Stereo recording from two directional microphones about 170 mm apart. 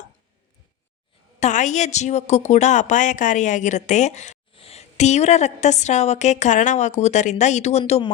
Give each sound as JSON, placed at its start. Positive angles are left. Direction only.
{"t": 1.4, "sound": "a woman's voice", "side_deg": 45}